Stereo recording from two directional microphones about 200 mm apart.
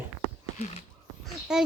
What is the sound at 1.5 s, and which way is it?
Speech, 5° right (ahead or behind).